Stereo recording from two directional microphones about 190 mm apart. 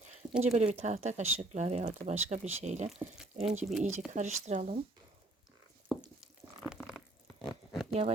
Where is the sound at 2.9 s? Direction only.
5° right (ahead or behind).